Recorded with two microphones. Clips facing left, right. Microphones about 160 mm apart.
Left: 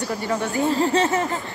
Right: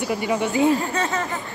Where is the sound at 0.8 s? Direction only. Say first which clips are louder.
Left 5 dB; 25° left (ahead or behind).